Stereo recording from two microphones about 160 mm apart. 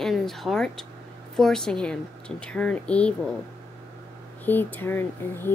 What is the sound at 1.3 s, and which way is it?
Speech, 5° left (ahead or behind).